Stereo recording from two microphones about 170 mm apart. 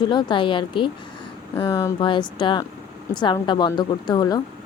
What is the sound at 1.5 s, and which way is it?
Speech, 20° left (ahead or behind).